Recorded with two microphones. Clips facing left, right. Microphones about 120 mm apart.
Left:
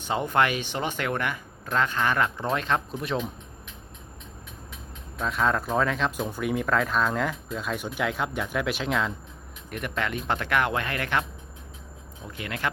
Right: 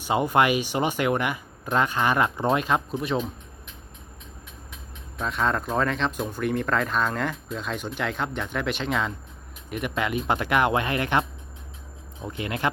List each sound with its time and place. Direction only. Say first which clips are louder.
0.1 s speech: right 3 dB; 10° right (ahead or behind)
5.1 s speech: even; centre (ahead or behind); by 12.7 s 20° right (ahead or behind)